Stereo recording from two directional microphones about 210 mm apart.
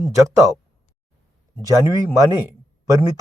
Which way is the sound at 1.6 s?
15° right (ahead or behind).